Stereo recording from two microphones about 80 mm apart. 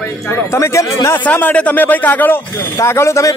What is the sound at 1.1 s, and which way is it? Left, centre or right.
A man's voice, left.